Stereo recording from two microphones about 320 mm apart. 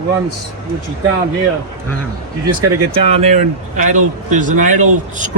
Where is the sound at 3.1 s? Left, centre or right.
Right.